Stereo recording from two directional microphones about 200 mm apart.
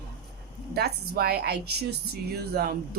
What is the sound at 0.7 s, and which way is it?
A woman's voice, 55° right (ahead or behind).